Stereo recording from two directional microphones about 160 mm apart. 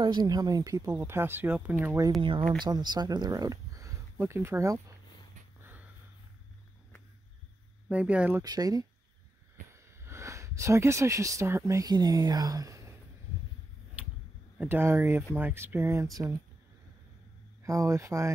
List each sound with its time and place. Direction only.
0.0 s speech: 25° right (ahead or behind); by 2.0 s 10° right (ahead or behind)
2.6 s speech: 25° right (ahead or behind)
7.9 s speech: 10° right (ahead or behind)
8.4 s speech: 25° right (ahead or behind)
14.6 s speech: 15° right (ahead or behind)
17.6 s speech: 20° right (ahead or behind)